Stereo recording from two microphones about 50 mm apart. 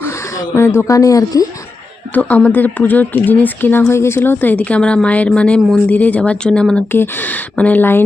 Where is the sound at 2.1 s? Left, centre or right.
Left.